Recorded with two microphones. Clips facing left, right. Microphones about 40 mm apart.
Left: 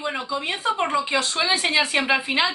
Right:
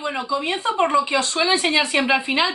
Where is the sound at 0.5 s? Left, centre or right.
Centre.